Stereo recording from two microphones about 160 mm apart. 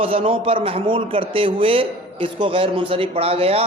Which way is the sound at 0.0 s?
35° right (ahead or behind).